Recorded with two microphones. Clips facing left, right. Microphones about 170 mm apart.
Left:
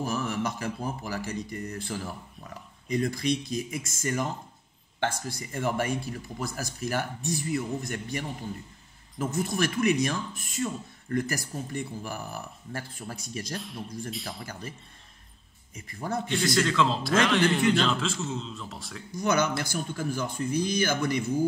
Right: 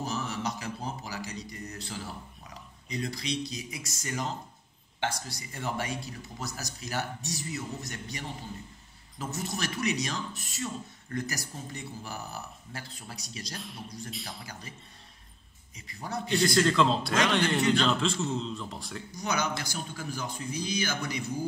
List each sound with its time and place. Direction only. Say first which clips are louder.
0.0 s speech: left 4 dB; 55° left (ahead or behind)
13.6 s a man's voice: left 5 dB; centre (ahead or behind)
14.4 s speech: left 5 dB; 55° left (ahead or behind)
15.7 s speech: left 5 dB; 50° left (ahead or behind)
16.3 s a man's voice: right 3 dB; centre (ahead or behind)
19.1 s speech: left 6 dB; 55° left (ahead or behind)